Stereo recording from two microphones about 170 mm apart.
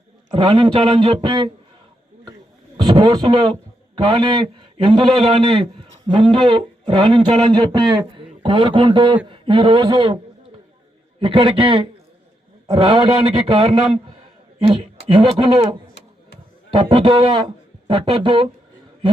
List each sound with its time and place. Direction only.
0.3 s speech: 25° right (ahead or behind)
2.7 s a man's voice: 25° right (ahead or behind)
11.2 s speech: 30° right (ahead or behind)
16.7 s speech: 30° right (ahead or behind)